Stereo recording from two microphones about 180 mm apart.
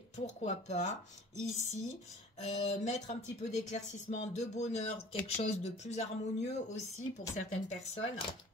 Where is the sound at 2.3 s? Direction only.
40° left (ahead or behind).